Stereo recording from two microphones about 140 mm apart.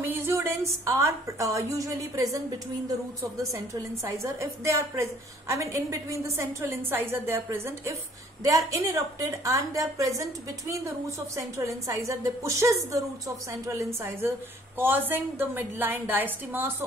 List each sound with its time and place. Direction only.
0.0 s a woman's voice: 15° right (ahead or behind)